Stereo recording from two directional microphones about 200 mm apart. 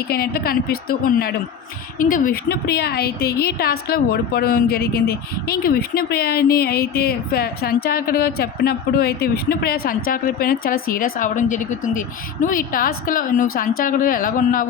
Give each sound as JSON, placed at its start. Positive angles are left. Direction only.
{"t": 0.1, "sound": "a woman's voice", "side_deg": 50}